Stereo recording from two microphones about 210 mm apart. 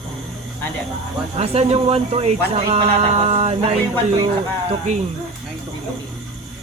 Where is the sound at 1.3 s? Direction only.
30° right (ahead or behind).